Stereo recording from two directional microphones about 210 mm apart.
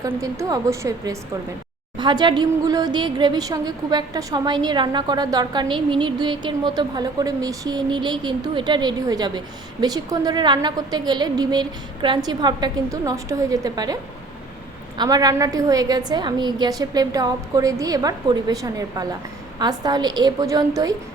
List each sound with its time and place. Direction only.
0.0 s a woman's voice: 15° right (ahead or behind)